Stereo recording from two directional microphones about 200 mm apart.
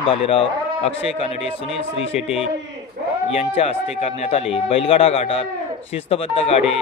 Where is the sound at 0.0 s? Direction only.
30° left (ahead or behind).